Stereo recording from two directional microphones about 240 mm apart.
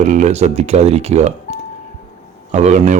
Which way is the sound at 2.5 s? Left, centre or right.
Right.